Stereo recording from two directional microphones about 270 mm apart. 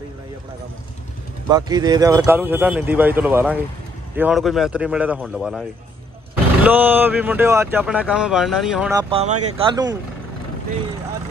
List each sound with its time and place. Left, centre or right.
1.5 s speech: centre
8.9 s speech: right